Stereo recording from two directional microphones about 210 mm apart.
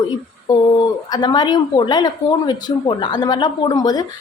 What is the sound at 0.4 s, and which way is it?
A woman's voice, 20° left (ahead or behind).